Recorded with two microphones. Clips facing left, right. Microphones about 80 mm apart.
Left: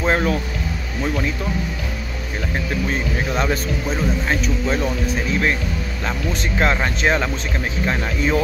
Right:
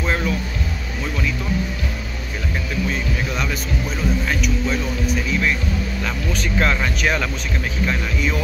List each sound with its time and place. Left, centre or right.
0.0 s music: left
3.3 s speech: left
6.6 s speech: left